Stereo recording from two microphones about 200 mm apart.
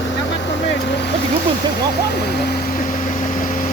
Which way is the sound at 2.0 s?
55° left (ahead or behind).